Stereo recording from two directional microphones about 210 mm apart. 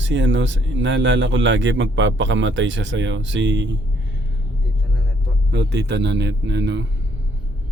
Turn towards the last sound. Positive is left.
turn(degrees=-55)  # may be behind; listen again after turning